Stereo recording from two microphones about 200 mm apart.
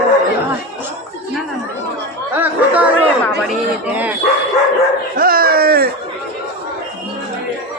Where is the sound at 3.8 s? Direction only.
10° right (ahead or behind).